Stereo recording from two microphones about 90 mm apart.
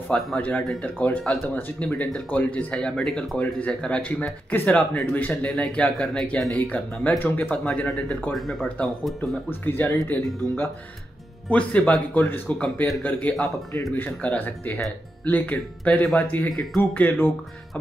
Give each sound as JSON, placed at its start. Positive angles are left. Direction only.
{"t": 0.1, "sound": "speech", "side_deg": 15}
{"t": 8.3, "sound": "speech", "side_deg": 0}
{"t": 9.5, "sound": "speech", "side_deg": 25}
{"t": 16.4, "sound": "speech", "side_deg": 0}
{"t": 16.9, "sound": "speech", "side_deg": 20}